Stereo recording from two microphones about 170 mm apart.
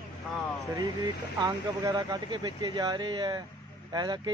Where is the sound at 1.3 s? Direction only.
20° right (ahead or behind).